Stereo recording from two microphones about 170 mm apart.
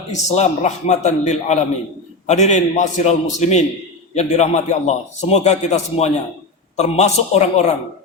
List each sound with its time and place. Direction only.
0.1 s a man's voice: 40° left (ahead or behind)